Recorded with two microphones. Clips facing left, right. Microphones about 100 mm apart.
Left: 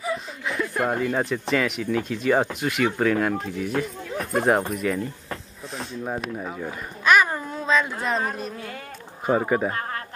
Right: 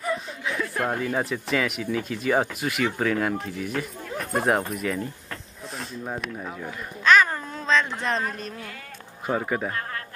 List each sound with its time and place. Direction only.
0.0 s chuckle: centre (ahead or behind)
1.5 s speech: 5° right (ahead or behind)
5.8 s a child's voice: 10° left (ahead or behind)
9.7 s speech: 30° left (ahead or behind)